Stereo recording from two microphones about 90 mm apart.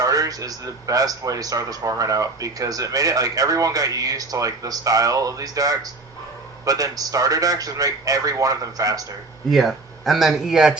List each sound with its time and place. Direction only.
0.0 s a man's voice: 40° right (ahead or behind)
9.5 s speech: centre (ahead or behind)